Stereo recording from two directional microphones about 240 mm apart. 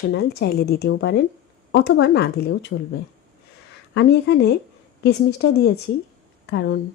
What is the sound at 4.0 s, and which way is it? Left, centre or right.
A woman's voice, left.